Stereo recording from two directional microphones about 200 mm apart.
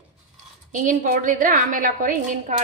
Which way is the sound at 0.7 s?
40° right (ahead or behind).